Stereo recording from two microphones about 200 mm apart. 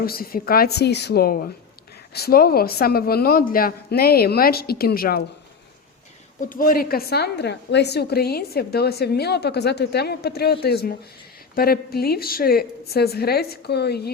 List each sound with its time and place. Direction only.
0.0 s a woman's voice: 50° left (ahead or behind)
6.4 s a woman's voice: 45° left (ahead or behind)